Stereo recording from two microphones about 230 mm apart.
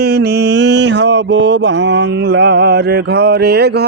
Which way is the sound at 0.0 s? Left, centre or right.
Right.